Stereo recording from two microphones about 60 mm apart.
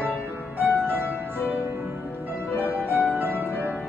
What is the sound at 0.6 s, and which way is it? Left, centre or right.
Music, right.